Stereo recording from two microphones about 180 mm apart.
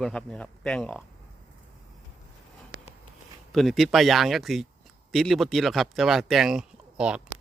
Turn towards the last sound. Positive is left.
turn(degrees=-5)  # may be behind; listen again after turning